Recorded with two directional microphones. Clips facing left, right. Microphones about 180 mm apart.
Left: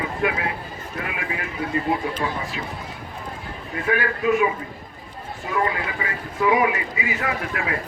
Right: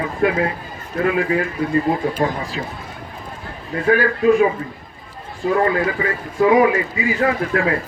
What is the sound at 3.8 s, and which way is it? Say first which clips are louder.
Speech: right 7 dB; 35° right (ahead or behind).